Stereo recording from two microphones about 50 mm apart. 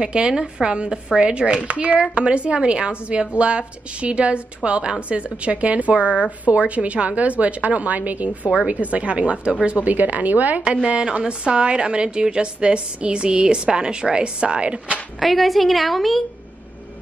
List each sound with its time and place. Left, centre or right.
0.0 s a woman's voice: centre
9.8 s a woman's voice: right
10.6 s a woman's voice: right
15.1 s a woman's voice: centre